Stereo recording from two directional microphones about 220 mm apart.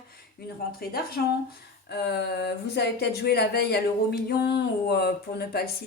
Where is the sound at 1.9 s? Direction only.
50° left (ahead or behind).